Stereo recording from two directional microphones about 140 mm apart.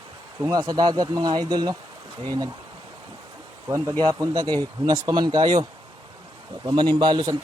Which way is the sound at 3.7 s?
20° right (ahead or behind).